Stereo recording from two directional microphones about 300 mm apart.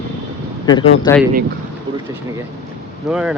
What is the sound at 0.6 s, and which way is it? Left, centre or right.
Speech, centre.